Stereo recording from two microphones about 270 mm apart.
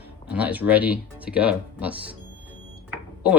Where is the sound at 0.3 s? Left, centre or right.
Centre.